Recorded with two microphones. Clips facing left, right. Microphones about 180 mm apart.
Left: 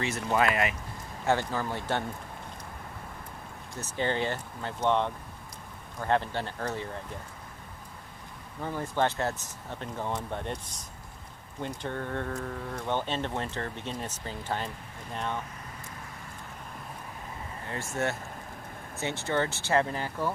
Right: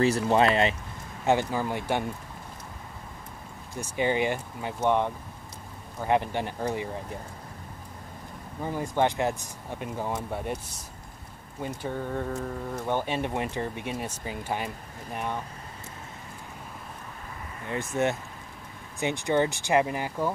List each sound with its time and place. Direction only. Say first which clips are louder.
0.0 s speech: right 5 dB; 30° right (ahead or behind)
1.2 s speech: right 3 dB; 15° right (ahead or behind)
3.8 s speech: right 4 dB; 10° right (ahead or behind)
8.6 s speech: right 3 dB; 15° right (ahead or behind)
11.6 s speech: right 2 dB; 10° right (ahead or behind)
17.6 s speech: right 5 dB; 20° right (ahead or behind)